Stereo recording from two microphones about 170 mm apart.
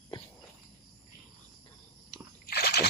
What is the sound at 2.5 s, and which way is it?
Slosh, 70° left (ahead or behind).